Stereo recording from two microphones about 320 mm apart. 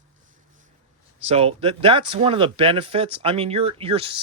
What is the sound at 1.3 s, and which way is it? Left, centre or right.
Speech, centre.